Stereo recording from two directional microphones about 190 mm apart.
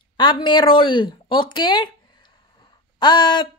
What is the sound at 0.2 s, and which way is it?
Speech, 25° left (ahead or behind).